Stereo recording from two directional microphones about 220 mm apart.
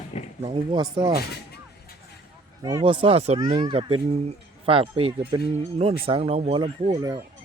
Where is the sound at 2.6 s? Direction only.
15° right (ahead or behind).